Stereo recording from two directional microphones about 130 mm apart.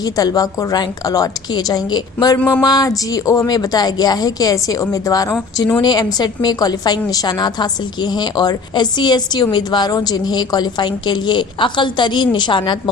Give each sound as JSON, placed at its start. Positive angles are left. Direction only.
{"t": 0.0, "sound": "a woman's voice", "side_deg": 30}